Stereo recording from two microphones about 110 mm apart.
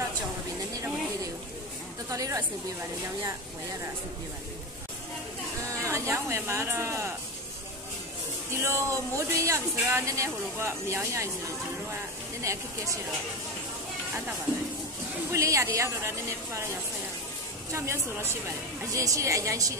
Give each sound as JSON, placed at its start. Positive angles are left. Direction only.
{"t": 2.0, "sound": "a woman's voice", "side_deg": -30}
{"t": 5.6, "sound": "speech", "side_deg": -30}
{"t": 8.5, "sound": "speech", "side_deg": -25}
{"t": 11.9, "sound": "a sound", "side_deg": -30}
{"t": 15.3, "sound": "speech", "side_deg": -30}
{"t": 17.7, "sound": "speech", "side_deg": -25}